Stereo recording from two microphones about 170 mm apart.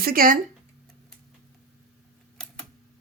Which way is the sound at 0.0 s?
60° right (ahead or behind).